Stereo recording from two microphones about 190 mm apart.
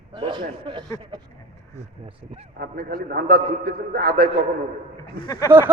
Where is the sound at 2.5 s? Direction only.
50° right (ahead or behind).